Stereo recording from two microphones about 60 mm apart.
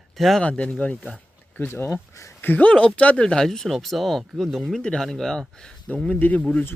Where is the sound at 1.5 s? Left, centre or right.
Left.